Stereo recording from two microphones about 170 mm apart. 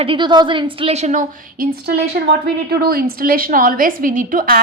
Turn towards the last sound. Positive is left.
turn(degrees=-55)  # may be behind; listen again after turning